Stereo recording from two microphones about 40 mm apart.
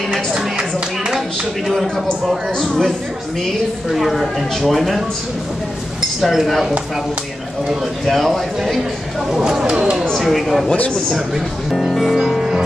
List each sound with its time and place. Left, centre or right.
2.2 s speech: centre
3.9 s speech: centre
6.2 s speech: centre
8.0 s speech: centre
9.3 s speech: centre
10.2 s speech: centre